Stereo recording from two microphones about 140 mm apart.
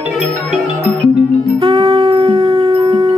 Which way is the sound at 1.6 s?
35° right (ahead or behind).